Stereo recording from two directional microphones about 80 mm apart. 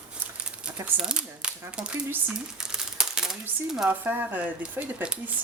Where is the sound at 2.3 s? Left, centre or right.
Centre.